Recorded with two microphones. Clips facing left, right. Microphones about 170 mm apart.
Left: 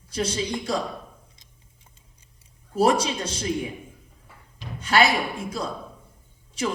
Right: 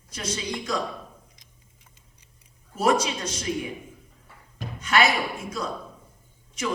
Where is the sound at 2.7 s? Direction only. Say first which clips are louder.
Left 2 dB; 30° left (ahead or behind).